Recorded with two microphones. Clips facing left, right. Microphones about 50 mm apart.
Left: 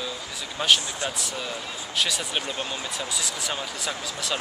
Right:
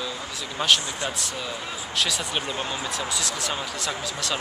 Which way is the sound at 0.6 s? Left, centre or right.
Centre.